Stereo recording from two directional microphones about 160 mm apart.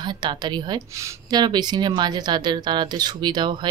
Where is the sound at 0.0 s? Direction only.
30° right (ahead or behind).